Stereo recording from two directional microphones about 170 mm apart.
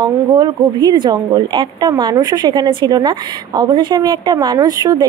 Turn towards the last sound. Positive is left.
turn(degrees=-20)  # may be behind; listen again after turning